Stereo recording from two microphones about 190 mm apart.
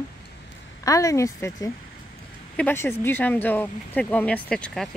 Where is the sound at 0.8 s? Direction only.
15° left (ahead or behind).